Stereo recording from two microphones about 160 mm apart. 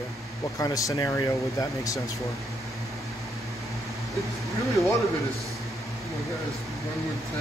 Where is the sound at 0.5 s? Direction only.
20° left (ahead or behind).